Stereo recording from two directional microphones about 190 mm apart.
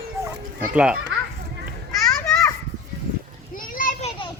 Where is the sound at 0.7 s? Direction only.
5° right (ahead or behind).